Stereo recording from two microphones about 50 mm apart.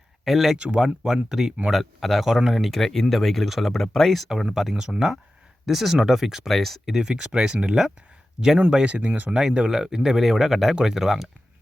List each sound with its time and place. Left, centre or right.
0.3 s speech: centre
0.5 s speech: centre
2.6 s speech: centre
6.5 s speech: centre
6.9 s speech: centre
9.3 s speech: centre